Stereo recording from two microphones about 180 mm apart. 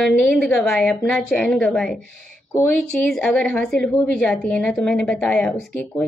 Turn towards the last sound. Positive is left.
turn(degrees=5)  # may be behind; listen again after turning